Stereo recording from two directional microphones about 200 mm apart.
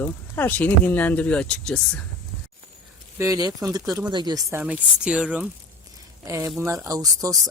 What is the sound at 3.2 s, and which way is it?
Speech, 15° right (ahead or behind).